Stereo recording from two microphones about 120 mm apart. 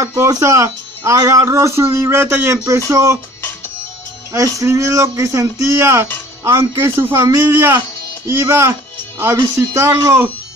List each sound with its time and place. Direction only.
0.0 s speech: 30° right (ahead or behind)
4.6 s speech: 25° right (ahead or behind)